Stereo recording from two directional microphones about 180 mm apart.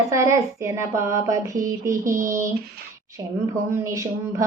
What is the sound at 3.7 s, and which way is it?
Speech, 15° right (ahead or behind).